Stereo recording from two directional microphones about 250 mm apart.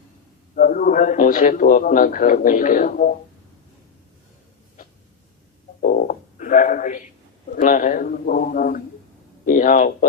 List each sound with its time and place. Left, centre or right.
0.5 s a man's voice: left
5.8 s a sound: left
7.5 s a man's voice: left